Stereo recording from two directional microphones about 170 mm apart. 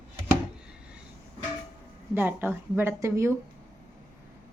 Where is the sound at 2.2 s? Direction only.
10° right (ahead or behind).